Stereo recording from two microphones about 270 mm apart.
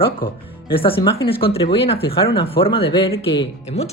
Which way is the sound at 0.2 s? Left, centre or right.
Left.